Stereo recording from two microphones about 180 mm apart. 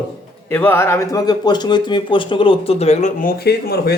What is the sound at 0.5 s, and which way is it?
Speech, 10° left (ahead or behind).